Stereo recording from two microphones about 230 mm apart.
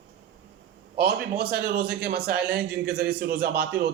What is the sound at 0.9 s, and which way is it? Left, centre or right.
A man's voice, right.